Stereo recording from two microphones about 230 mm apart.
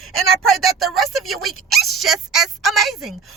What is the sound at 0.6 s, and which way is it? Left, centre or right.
Speech, centre.